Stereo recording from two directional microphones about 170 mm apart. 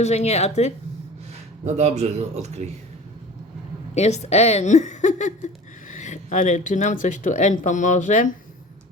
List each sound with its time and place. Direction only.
0.0 s a woman's voice: 40° left (ahead or behind)
1.6 s speech: 40° right (ahead or behind)
3.9 s speech: 40° left (ahead or behind)